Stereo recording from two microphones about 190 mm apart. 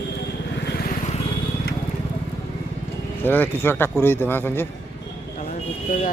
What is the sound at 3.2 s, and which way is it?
Speech, 10° left (ahead or behind).